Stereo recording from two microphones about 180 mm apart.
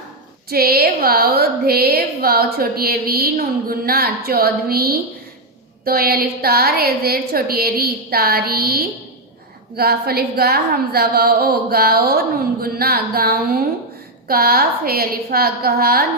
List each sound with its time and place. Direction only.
0.5 s a woman's voice: 55° right (ahead or behind)